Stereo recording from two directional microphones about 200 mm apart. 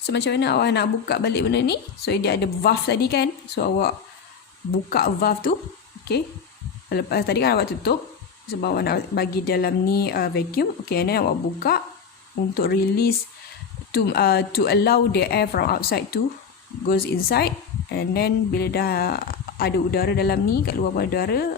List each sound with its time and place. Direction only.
0.0 s speech: 60° left (ahead or behind)
6.9 s speech: 50° left (ahead or behind)